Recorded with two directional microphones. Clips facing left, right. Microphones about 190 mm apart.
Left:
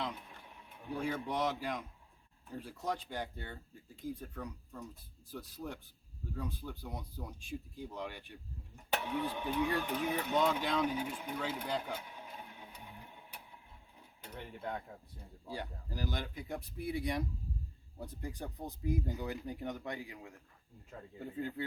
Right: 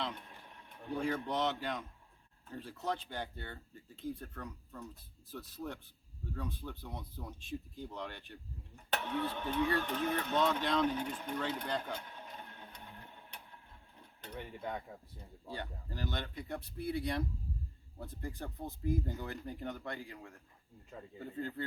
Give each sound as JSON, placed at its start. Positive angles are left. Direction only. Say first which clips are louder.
{"t": 0.0, "sound": "a sound", "louder": "even", "side_deg": 5}
{"t": 2.5, "sound": "speech", "louder": "even", "side_deg": 10}
{"t": 14.0, "sound": "cutlery", "louder": "right 2 dB", "side_deg": 5}
{"t": 15.4, "sound": "speech", "louder": "left 1 dB", "side_deg": 5}
{"t": 21.2, "sound": "speech", "louder": "left 1 dB", "side_deg": 5}